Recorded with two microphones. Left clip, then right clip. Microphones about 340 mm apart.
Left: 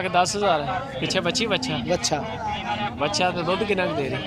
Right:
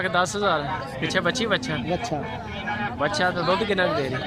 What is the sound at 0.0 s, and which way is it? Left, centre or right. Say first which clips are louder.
Speech: left 1 dB; centre.